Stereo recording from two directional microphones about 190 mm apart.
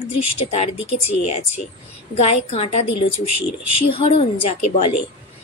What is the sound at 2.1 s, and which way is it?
A woman's voice, 30° left (ahead or behind).